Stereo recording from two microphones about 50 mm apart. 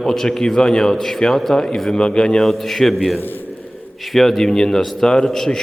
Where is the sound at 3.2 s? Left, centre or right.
Left.